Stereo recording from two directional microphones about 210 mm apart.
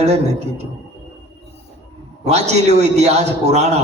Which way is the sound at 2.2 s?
30° right (ahead or behind).